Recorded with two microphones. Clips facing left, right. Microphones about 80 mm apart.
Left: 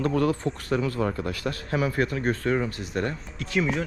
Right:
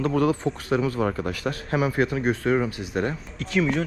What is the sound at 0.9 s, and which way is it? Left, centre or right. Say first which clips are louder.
Speech: right 2 dB; right.